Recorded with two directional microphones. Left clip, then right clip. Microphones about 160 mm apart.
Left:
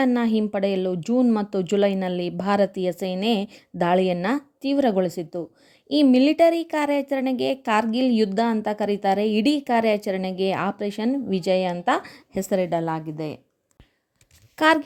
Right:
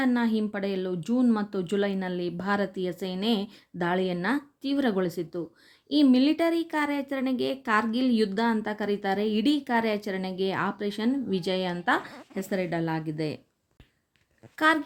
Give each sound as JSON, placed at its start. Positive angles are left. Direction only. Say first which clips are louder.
{"t": 0.0, "sound": "speech", "louder": "left 5 dB", "side_deg": 45}
{"t": 12.7, "sound": "a woman's voice", "louder": "left 5 dB", "side_deg": 25}
{"t": 14.5, "sound": "speech", "louder": "left 5 dB", "side_deg": 50}